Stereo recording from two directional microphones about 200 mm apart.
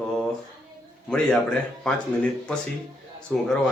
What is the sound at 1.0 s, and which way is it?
Speech, centre (ahead or behind).